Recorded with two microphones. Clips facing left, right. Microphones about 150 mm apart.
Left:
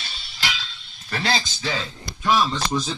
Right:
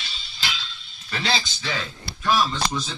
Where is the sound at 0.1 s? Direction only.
75° left (ahead or behind).